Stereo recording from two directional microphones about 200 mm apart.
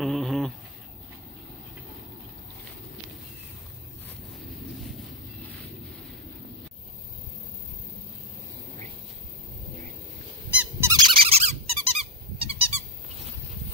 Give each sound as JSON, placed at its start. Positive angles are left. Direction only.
{"t": 0.0, "sound": "a sound", "side_deg": 0}
{"t": 10.5, "sound": "squeak", "side_deg": -5}
{"t": 10.9, "sound": "squeak", "side_deg": -20}